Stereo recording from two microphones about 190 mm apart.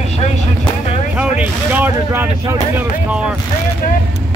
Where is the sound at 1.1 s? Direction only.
5° right (ahead or behind).